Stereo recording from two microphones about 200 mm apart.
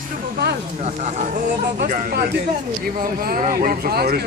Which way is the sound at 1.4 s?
45° right (ahead or behind).